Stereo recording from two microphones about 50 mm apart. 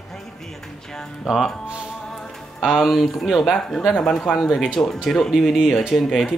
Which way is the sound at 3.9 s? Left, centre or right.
Centre.